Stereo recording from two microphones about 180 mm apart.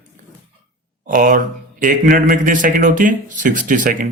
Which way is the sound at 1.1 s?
50° right (ahead or behind).